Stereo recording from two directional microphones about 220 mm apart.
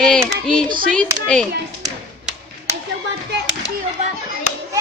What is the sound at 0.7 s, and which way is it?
Speech, 40° right (ahead or behind).